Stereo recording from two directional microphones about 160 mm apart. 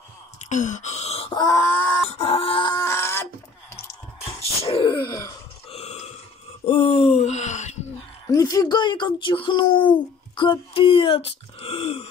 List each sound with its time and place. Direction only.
0.5 s speech: 50° left (ahead or behind); by 2.0 s 15° left (ahead or behind)
2.0 s grunt: 35° left (ahead or behind); by 3.3 s 15° left (ahead or behind)
4.4 s a sound: 35° left (ahead or behind)
5.7 s burping: 40° left (ahead or behind)
6.6 s a sound: 35° left (ahead or behind)
8.3 s speech: 20° left (ahead or behind); by 12.1 s 35° left (ahead or behind)